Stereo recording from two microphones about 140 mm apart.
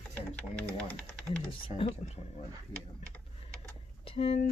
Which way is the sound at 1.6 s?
45° left (ahead or behind).